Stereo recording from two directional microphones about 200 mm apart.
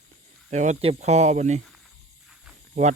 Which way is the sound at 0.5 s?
35° right (ahead or behind).